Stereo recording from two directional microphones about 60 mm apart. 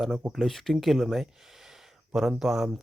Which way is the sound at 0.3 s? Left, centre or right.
Centre.